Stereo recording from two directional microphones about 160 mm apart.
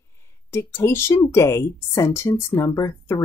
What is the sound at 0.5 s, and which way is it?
A woman's voice, 15° left (ahead or behind).